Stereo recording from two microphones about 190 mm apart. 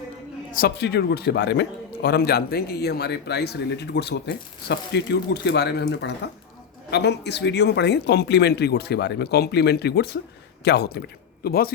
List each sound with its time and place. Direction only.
0.5 s a man's voice: 55° left (ahead or behind)